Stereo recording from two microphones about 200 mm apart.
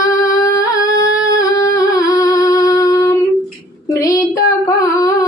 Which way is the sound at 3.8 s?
15° left (ahead or behind).